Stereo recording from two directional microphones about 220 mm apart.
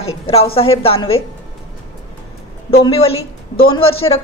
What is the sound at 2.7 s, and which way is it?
Speech, 25° left (ahead or behind).